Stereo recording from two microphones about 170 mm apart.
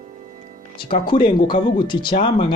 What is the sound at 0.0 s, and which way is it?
Music, 45° right (ahead or behind).